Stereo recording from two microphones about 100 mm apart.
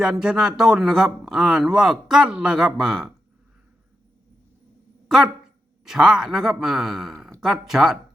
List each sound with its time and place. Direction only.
0.0 s a man's voice: 5° right (ahead or behind)
5.0 s dog: 5° right (ahead or behind)
5.8 s a man's voice: 5° right (ahead or behind)